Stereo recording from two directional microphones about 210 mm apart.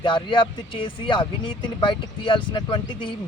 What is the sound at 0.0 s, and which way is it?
Speech, 25° left (ahead or behind).